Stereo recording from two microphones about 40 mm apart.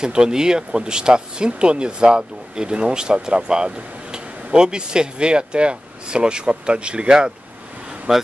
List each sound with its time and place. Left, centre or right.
0.0 s speech: centre